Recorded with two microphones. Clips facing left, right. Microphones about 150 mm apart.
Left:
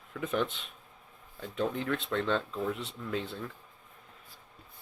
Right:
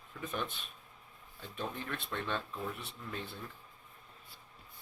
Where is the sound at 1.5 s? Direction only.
90° left.